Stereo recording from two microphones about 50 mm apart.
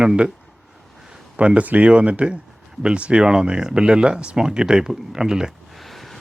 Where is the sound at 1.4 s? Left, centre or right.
Right.